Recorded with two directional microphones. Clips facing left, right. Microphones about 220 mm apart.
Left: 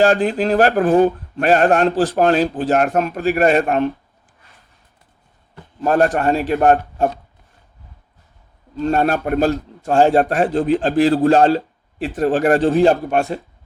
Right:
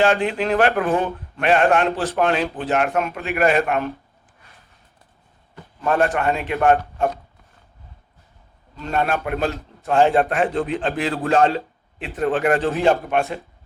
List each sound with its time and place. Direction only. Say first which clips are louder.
0.0 s a man's voice: left 4 dB; 40° left (ahead or behind)
5.8 s a man's voice: left 4 dB; 40° left (ahead or behind)
8.7 s a man's voice: left 5 dB; 40° left (ahead or behind)